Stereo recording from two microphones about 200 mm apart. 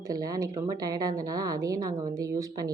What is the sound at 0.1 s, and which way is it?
Speech, 20° right (ahead or behind).